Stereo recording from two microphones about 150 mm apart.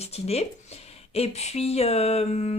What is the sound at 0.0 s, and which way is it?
Speech, 45° left (ahead or behind).